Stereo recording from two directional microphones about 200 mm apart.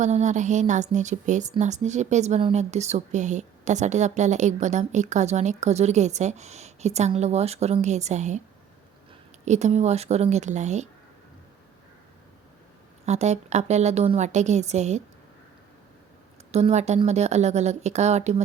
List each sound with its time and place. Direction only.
0.0 s a woman's voice: 35° right (ahead or behind)
9.4 s a woman's voice: 35° right (ahead or behind)
13.1 s a woman's voice: 35° right (ahead or behind)
16.5 s a woman's voice: 35° right (ahead or behind)